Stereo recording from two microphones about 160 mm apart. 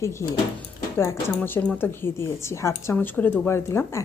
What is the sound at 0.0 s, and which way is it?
A woman's voice, 15° left (ahead or behind).